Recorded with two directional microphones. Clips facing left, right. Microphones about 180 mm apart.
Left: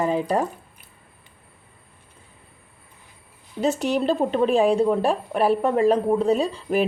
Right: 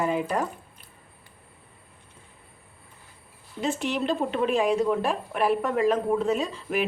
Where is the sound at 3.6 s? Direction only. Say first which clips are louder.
Left 5 dB; 40° left (ahead or behind).